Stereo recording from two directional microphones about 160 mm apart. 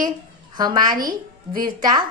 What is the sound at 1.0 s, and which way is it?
Speech, 60° right (ahead or behind).